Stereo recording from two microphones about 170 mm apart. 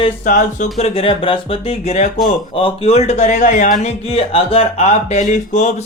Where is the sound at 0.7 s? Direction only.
35° left (ahead or behind); by 3.9 s 55° left (ahead or behind).